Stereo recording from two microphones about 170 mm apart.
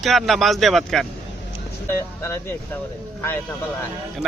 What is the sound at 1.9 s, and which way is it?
Speech, 15° left (ahead or behind).